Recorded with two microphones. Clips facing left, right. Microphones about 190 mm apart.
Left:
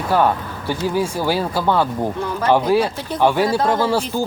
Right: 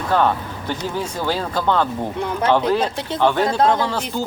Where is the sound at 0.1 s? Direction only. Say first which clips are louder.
Left 1 dB; 10° left (ahead or behind).